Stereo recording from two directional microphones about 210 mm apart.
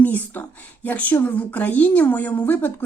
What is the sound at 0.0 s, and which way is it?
Speech, 5° left (ahead or behind).